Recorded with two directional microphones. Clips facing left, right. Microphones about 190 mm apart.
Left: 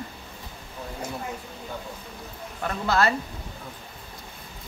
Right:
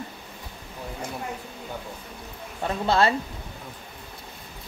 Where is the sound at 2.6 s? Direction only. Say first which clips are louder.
Right 2 dB; 25° right (ahead or behind).